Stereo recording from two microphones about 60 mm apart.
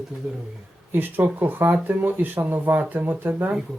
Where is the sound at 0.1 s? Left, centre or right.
Right.